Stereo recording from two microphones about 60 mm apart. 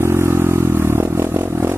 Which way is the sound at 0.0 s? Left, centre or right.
Right.